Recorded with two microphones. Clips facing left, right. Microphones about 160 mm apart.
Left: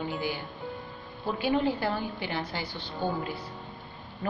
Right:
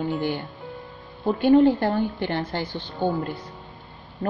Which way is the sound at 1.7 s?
50° right (ahead or behind).